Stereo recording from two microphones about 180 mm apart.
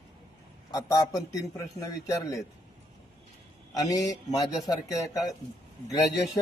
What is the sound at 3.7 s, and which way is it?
A man's voice, 20° left (ahead or behind).